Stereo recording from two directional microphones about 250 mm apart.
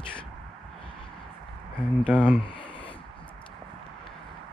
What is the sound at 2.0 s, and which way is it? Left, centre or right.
Speech, centre.